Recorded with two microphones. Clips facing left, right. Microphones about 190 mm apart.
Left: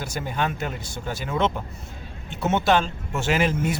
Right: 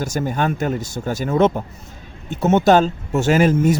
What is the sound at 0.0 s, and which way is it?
Speech, 45° right (ahead or behind).